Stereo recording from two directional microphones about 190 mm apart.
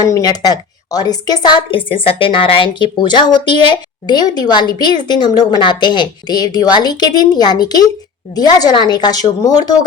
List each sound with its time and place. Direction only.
0.0 s a woman's voice: 20° left (ahead or behind)